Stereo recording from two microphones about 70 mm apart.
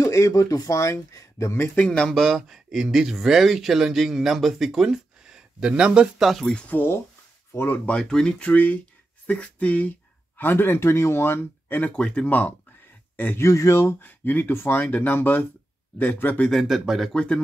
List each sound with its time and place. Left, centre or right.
0.0 s speech: left
1.8 s speech: centre
2.0 s speech: centre
6.7 s speech: left
7.8 s speech: centre; by 11.9 s left
11.9 s a man's voice: centre
13.4 s speech: left
14.0 s speech: left
16.6 s speech: centre
17.1 s speech: centre